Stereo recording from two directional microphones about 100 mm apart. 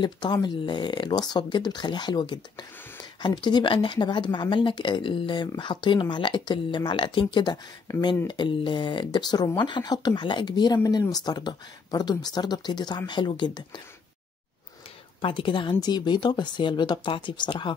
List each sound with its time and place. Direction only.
0.0 s speech: 45° left (ahead or behind)
15.2 s speech: 55° left (ahead or behind)